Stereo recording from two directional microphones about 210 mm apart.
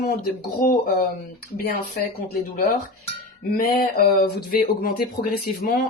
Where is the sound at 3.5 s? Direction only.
40° left (ahead or behind).